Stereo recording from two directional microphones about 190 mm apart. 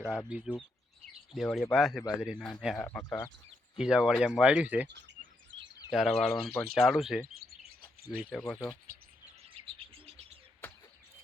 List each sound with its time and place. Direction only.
0.3 s speech: 5° right (ahead or behind)
3.0 s speech: 15° left (ahead or behind)
3.8 s speech: 5° right (ahead or behind)
5.9 s speech: centre (ahead or behind)
7.4 s chirp: 55° right (ahead or behind)
8.1 s speech: 5° right (ahead or behind)
9.4 s chirp: 30° right (ahead or behind)